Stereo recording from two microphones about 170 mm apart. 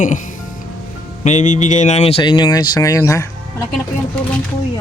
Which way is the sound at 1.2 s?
45° left (ahead or behind).